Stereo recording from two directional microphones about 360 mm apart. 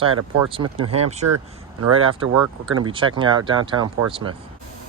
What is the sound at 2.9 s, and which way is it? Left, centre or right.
Speech, centre.